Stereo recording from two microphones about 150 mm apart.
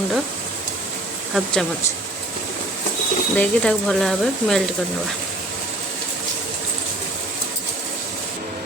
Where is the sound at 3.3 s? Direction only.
10° left (ahead or behind).